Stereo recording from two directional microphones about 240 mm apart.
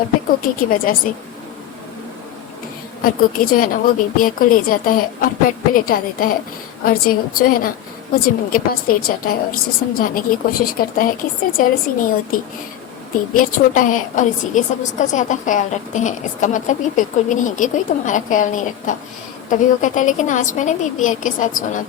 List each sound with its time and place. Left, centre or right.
0.4 s a woman's voice: left
3.0 s a woman's voice: left